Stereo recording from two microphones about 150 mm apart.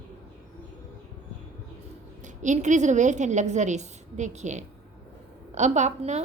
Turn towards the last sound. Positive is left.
turn(degrees=-50)  # may be behind; listen again after turning